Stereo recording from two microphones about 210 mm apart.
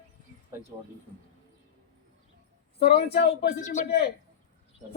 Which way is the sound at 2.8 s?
50° left (ahead or behind).